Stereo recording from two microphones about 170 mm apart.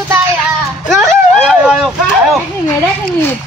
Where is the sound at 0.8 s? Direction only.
Centre (ahead or behind).